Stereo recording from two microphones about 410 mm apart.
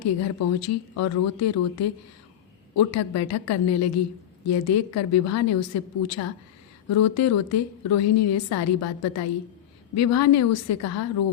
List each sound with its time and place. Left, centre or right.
0.0 s a woman's voice: left